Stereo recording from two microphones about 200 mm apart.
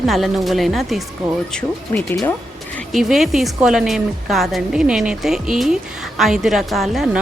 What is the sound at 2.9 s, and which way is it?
A woman's voice, centre (ahead or behind).